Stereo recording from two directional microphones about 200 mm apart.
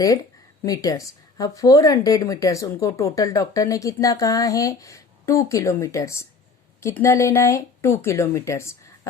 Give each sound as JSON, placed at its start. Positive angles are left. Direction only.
{"t": 0.6, "sound": "speech", "side_deg": 20}